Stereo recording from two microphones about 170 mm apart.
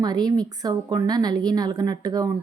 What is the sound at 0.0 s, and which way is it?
A woman's voice, 25° right (ahead or behind).